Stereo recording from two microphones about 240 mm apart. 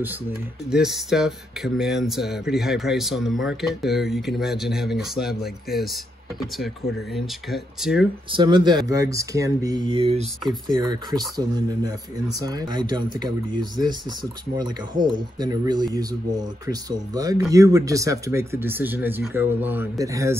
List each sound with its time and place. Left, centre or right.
0.7 s speech: centre
7.2 s speech: centre
8.3 s speech: centre